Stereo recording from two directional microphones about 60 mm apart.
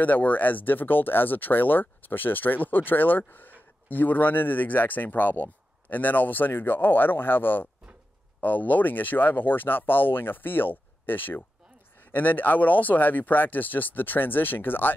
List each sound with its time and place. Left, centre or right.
0.0 s speech: left